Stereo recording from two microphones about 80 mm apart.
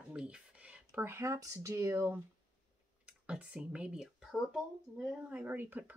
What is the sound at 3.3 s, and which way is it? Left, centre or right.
Speech, centre.